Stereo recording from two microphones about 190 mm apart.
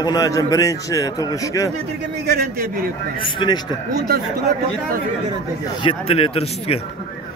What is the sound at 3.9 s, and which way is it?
Speech, 55° right (ahead or behind).